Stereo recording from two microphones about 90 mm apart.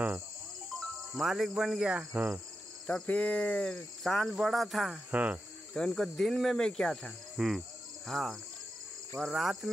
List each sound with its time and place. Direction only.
0.7 s speech: 5° right (ahead or behind); by 2.4 s 20° right (ahead or behind)
2.9 s speech: 15° left (ahead or behind)
5.1 s cricket: 20° right (ahead or behind)
5.8 s speech: 5° left (ahead or behind)